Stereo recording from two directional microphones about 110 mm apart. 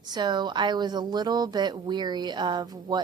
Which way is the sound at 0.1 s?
40° right (ahead or behind).